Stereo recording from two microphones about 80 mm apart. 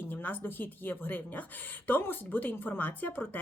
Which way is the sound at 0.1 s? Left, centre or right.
Left.